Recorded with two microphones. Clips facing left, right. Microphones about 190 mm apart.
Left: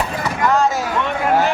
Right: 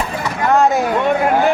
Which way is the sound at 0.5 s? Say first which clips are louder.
Right 7 dB; 60° right (ahead or behind).